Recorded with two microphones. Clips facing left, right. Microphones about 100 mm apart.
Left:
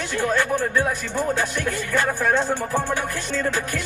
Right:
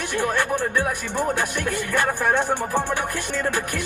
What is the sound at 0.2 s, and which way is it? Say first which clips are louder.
Speech: left 2 dB; 20° right (ahead or behind).